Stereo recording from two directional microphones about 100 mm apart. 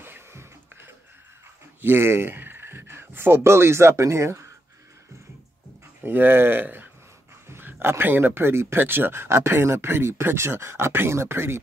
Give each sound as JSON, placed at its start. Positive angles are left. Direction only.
{"t": 0.0, "sound": "a sound", "side_deg": -25}
{"t": 1.8, "sound": "speech", "side_deg": -20}
{"t": 6.0, "sound": "speech", "side_deg": -20}